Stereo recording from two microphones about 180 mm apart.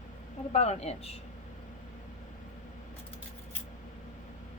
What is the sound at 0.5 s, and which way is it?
Speech, 35° left (ahead or behind).